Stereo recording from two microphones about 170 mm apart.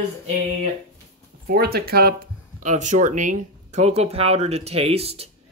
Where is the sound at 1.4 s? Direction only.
65° right (ahead or behind).